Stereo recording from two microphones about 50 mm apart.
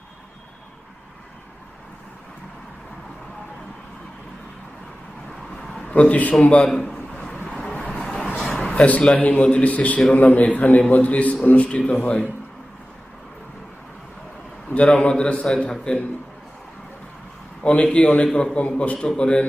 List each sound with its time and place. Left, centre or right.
5.5 s a sound: centre
5.9 s a man's voice: left
6.7 s a man's voice: centre
8.0 s vehicle: centre
8.4 s a sound: centre
8.6 s a man's voice: left
14.7 s a man's voice: left
17.6 s a man's voice: left
18.9 s a man's voice: centre